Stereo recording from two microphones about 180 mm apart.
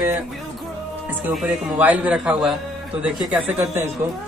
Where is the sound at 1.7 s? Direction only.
10° right (ahead or behind).